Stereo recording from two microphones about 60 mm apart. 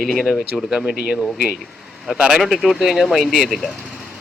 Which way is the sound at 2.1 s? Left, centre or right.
Centre.